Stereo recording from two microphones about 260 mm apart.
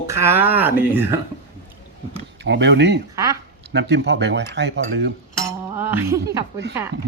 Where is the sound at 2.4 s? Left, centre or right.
Right.